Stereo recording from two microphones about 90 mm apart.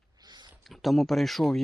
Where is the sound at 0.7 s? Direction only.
Centre (ahead or behind).